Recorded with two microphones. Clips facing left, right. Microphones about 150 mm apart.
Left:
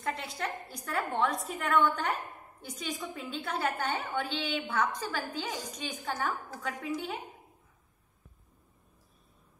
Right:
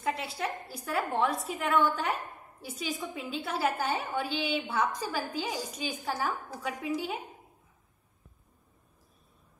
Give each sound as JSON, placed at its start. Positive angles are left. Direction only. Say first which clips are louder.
{"t": 0.0, "sound": "a woman's voice", "louder": "right 3 dB", "side_deg": -5}